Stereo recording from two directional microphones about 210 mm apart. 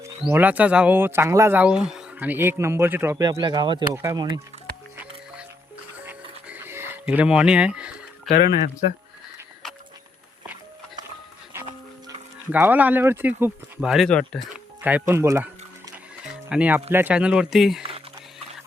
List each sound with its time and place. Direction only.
0.0 s speech: 10° right (ahead or behind)
6.1 s a sound: 10° right (ahead or behind)
12.5 s speech: 10° right (ahead or behind)
14.8 s speech: 10° right (ahead or behind)
16.5 s speech: 5° right (ahead or behind)